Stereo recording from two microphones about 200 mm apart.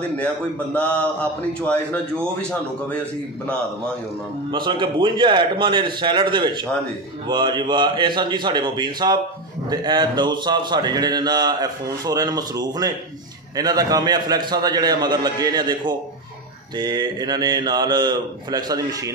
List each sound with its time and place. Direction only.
0.7 s a sound: 5° left (ahead or behind)
1.7 s a man's voice: 5° left (ahead or behind)
4.5 s a man's voice: 25° right (ahead or behind)